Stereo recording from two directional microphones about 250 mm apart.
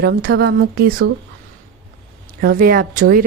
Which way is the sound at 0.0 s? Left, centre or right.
Right.